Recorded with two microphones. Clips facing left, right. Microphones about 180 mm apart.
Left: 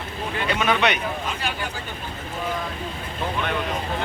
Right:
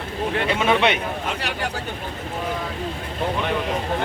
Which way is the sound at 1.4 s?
70° right (ahead or behind).